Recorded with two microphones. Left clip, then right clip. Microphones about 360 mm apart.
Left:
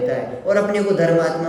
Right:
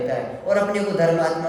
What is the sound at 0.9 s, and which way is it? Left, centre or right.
Speech, right.